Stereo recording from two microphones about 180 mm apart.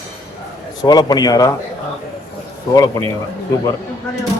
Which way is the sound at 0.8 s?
20° left (ahead or behind).